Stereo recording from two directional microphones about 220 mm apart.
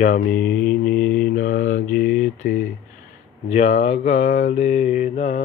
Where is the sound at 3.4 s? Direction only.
30° left (ahead or behind).